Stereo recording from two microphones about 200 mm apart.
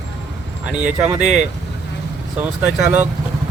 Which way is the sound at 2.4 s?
5° right (ahead or behind).